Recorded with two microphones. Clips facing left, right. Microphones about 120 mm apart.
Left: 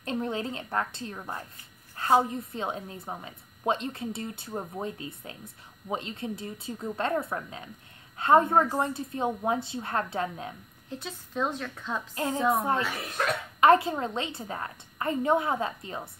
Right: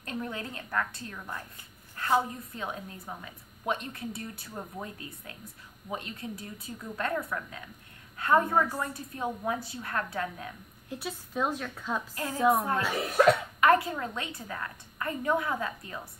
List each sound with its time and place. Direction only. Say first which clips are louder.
0.0 s a woman's voice: left 5 dB; 25° left (ahead or behind)
8.6 s a woman's voice: left 5 dB; 15° left (ahead or behind)
8.9 s a woman's voice: left 4 dB; 25° left (ahead or behind)
10.9 s a woman's voice: right 1 dB; 10° right (ahead or behind)
13.6 s a woman's voice: left 3 dB; 25° left (ahead or behind)